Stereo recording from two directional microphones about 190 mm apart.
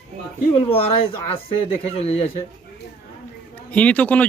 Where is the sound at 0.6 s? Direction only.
30° left (ahead or behind).